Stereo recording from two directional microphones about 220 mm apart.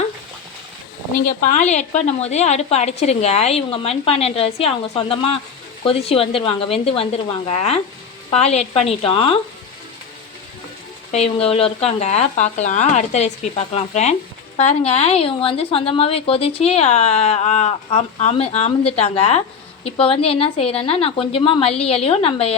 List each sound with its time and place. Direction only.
1.5 s speech: 30° left (ahead or behind)
11.1 s speech: 25° left (ahead or behind)